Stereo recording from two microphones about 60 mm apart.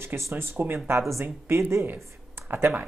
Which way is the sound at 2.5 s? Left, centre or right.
Right.